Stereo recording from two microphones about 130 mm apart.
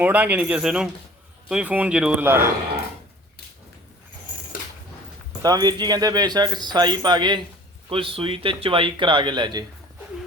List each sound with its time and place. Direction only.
0.0 s speech: 10° right (ahead or behind)
5.4 s speech: 30° right (ahead or behind)